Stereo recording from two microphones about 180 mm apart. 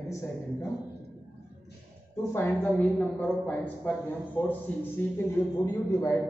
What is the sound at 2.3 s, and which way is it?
A man's voice, 10° left (ahead or behind).